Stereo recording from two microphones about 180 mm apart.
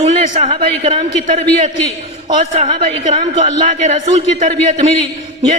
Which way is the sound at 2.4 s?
35° right (ahead or behind).